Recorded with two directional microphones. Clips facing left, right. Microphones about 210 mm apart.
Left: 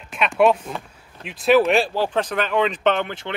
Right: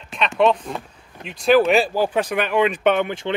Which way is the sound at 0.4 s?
5° left (ahead or behind).